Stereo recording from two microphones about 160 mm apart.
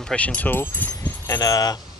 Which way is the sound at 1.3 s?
25° left (ahead or behind).